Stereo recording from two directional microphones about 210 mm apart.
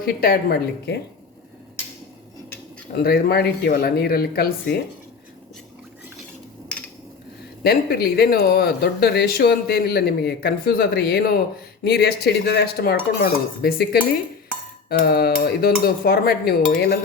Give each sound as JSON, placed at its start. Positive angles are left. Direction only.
{"t": 0.0, "sound": "speech", "side_deg": 45}
{"t": 3.0, "sound": "speech", "side_deg": 45}
{"t": 6.7, "sound": "a sound", "side_deg": 5}
{"t": 7.6, "sound": "speech", "side_deg": 45}